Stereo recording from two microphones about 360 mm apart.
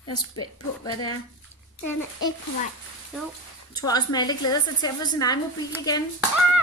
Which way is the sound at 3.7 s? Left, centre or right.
Centre.